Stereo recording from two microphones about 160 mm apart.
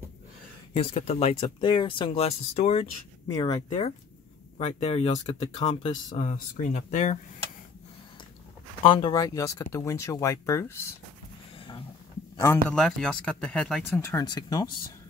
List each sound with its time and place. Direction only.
0.7 s speech: 35° left (ahead or behind)
3.3 s speech: 20° left (ahead or behind)
4.6 s speech: 40° left (ahead or behind)
8.8 s speech: 30° left (ahead or behind); by 10.9 s 15° left (ahead or behind)
12.6 s speech: 5° left (ahead or behind); by 14.7 s 25° left (ahead or behind)